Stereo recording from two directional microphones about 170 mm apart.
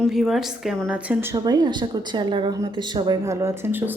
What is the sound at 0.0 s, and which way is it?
A woman's voice, centre (ahead or behind).